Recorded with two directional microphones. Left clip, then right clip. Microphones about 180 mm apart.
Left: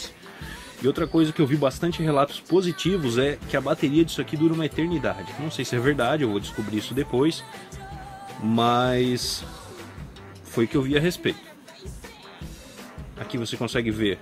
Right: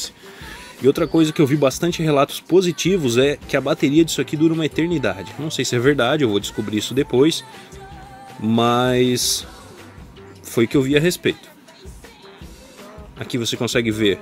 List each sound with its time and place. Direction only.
0.5 s music: 30° right (ahead or behind)
1.2 s speech: 30° right (ahead or behind)
8.5 s speech: 30° right (ahead or behind)
10.5 s speech: 35° right (ahead or behind)
13.2 s speech: 30° right (ahead or behind)